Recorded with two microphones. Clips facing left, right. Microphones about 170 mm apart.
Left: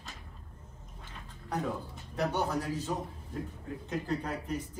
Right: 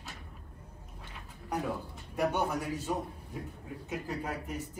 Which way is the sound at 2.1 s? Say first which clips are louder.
Right 1 dB; 15° right (ahead or behind).